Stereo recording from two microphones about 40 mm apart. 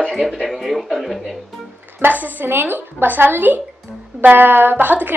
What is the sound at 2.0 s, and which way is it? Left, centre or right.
Speech, right.